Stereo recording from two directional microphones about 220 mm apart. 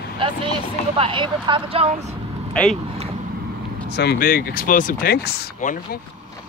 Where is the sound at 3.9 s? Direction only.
45° left (ahead or behind).